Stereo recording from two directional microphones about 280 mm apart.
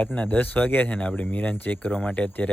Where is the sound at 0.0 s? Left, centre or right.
Centre.